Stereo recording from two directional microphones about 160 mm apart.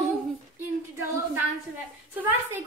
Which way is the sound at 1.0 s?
15° right (ahead or behind).